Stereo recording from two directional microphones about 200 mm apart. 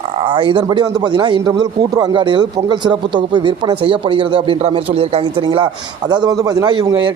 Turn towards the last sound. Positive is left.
turn(degrees=-20)  # may be behind; listen again after turning